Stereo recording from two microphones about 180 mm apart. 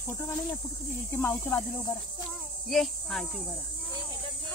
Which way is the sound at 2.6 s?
Centre (ahead or behind).